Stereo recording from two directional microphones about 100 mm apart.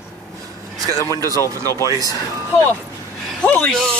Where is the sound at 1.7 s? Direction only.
35° left (ahead or behind).